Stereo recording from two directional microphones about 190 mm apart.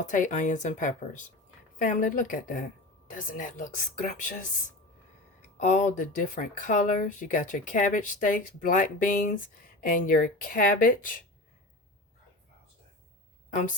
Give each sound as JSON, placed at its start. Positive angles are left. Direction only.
{"t": 0.1, "sound": "speech", "side_deg": 40}
{"t": 5.5, "sound": "speech", "side_deg": 40}